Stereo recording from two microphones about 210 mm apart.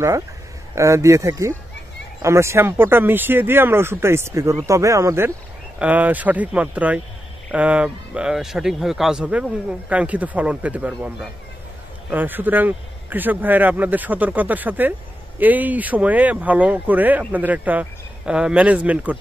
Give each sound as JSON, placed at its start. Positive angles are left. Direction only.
{"t": 0.7, "sound": "a man's voice", "side_deg": -15}